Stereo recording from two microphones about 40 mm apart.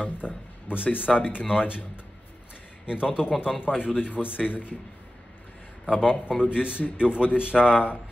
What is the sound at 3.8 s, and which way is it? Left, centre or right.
Speech, left.